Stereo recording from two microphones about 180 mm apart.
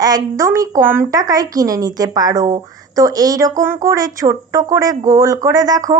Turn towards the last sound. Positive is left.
turn(degrees=-20)  # may be behind; listen again after turning